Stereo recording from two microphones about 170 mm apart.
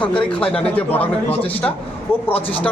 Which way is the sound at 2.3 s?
30° left (ahead or behind).